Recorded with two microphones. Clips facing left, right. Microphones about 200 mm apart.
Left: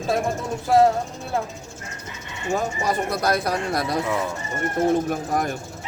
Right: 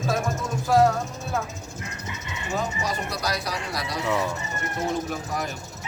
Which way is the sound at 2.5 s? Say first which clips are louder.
Left 5 dB; 50° left (ahead or behind).